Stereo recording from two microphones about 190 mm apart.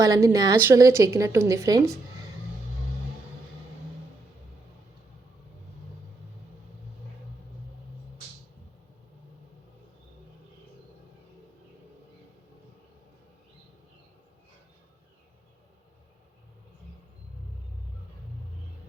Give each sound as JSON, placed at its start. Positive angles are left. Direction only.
{"t": 0.0, "sound": "a woman's voice", "side_deg": -20}